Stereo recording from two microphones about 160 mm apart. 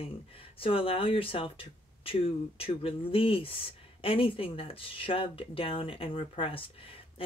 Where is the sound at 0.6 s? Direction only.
35° left (ahead or behind).